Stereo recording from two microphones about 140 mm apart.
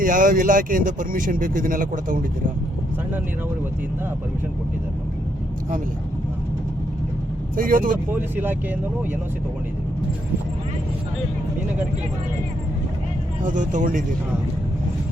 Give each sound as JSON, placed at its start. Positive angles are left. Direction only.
{"t": 0.0, "sound": "speech", "side_deg": -75}
{"t": 7.5, "sound": "speech", "side_deg": -80}
{"t": 8.1, "sound": "speech", "side_deg": -15}
{"t": 13.4, "sound": "speech", "side_deg": -65}